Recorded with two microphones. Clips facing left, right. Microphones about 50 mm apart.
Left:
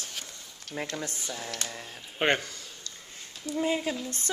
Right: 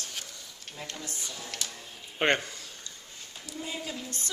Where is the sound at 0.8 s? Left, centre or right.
Left.